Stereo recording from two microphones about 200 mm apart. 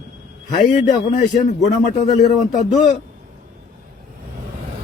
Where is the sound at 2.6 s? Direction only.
35° left (ahead or behind).